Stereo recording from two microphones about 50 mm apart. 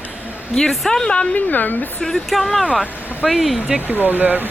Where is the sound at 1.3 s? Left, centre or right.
Left.